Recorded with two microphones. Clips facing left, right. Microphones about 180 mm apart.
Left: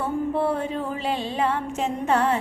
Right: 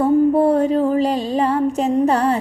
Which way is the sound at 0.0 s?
40° right (ahead or behind).